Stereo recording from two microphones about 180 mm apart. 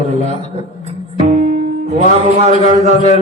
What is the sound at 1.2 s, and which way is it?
Music, 40° right (ahead or behind).